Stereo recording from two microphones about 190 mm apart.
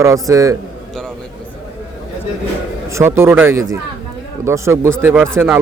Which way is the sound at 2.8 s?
15° right (ahead or behind).